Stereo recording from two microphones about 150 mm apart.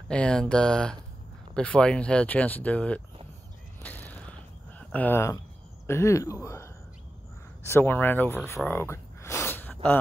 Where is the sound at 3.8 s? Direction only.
10° left (ahead or behind).